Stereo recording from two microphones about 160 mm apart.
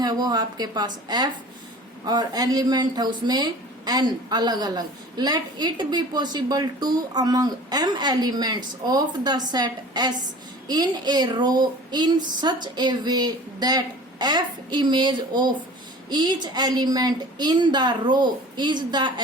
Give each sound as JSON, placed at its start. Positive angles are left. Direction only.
{"t": 0.0, "sound": "speech", "side_deg": -25}